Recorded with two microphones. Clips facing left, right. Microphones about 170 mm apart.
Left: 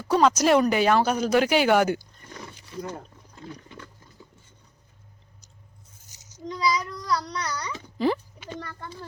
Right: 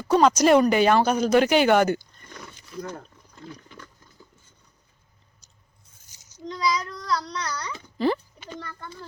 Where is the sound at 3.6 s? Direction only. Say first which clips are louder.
Left 2 dB; 25° left (ahead or behind).